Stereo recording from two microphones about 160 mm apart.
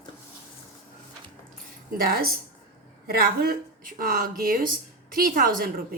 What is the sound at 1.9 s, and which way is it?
Speech, 65° right (ahead or behind).